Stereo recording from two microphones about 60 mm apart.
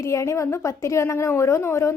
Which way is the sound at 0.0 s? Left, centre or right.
Left.